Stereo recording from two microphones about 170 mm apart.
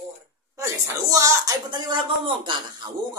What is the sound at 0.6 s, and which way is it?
Speech, 20° right (ahead or behind).